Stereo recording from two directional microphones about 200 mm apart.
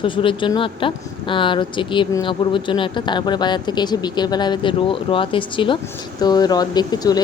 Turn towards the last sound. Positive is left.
turn(degrees=20)  # may be behind; listen again after turning